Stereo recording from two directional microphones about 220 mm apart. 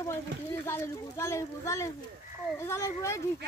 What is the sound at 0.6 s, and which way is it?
Speech, 10° left (ahead or behind).